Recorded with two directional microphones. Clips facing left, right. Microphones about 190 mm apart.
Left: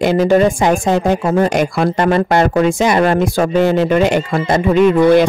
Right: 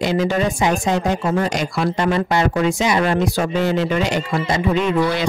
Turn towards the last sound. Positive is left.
turn(degrees=55)  # may be behind; listen again after turning